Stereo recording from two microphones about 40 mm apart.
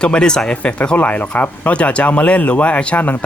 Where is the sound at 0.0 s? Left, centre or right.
Left.